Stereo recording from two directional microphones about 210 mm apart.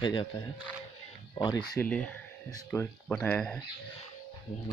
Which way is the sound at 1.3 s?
20° left (ahead or behind).